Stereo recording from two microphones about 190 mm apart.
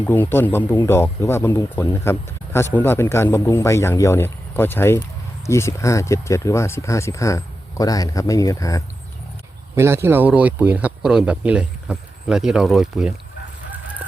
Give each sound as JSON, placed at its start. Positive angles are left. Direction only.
{"t": 0.0, "sound": "speech", "side_deg": 10}
{"t": 9.7, "sound": "speech", "side_deg": -15}